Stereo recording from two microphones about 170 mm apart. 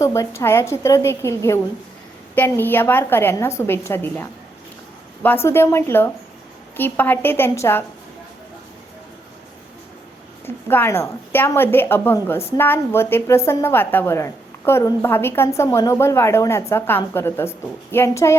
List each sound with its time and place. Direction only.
0.0 s a woman's voice: 15° left (ahead or behind)
10.4 s a woman's voice: 10° left (ahead or behind)